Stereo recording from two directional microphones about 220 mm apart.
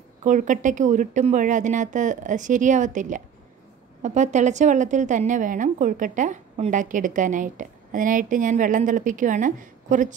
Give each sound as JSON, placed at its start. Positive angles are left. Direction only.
{"t": 0.2, "sound": "a woman's voice", "side_deg": -35}